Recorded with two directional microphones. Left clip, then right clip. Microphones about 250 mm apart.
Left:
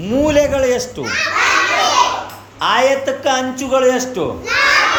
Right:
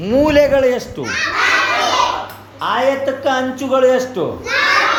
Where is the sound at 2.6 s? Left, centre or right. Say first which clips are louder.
Left 2 dB; centre.